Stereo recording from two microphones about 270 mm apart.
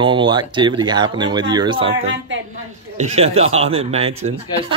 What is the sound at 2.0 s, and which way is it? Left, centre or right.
Speech, right.